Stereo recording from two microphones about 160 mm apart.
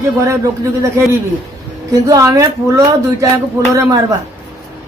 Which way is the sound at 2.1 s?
20° right (ahead or behind).